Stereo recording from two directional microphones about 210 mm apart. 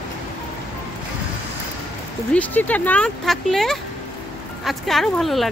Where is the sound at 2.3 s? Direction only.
10° left (ahead or behind).